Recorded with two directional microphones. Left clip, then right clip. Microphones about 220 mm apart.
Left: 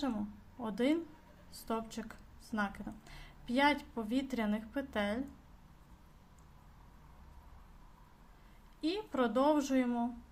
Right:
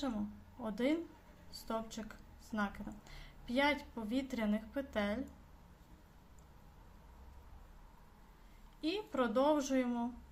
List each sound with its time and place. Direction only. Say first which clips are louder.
0.6 s a woman's voice: left 3 dB; 20° left (ahead or behind)
8.8 s a woman's voice: left 2 dB; 20° left (ahead or behind)